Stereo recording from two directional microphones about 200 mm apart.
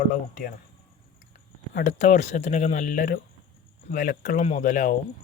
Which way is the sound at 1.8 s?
35° left (ahead or behind).